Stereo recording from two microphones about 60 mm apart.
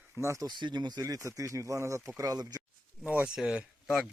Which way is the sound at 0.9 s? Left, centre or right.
Right.